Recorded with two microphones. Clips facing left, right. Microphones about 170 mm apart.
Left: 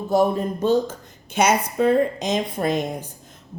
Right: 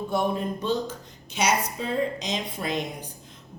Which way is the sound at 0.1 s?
40° left (ahead or behind).